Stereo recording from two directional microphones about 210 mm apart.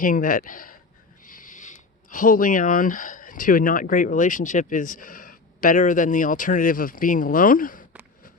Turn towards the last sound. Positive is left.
turn(degrees=40)  # may be behind; listen again after turning